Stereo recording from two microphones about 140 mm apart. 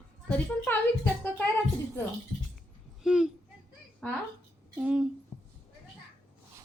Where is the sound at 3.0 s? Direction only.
5° right (ahead or behind).